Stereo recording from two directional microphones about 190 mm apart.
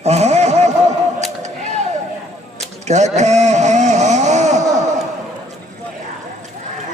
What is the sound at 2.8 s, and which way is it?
Vehicle, 35° right (ahead or behind).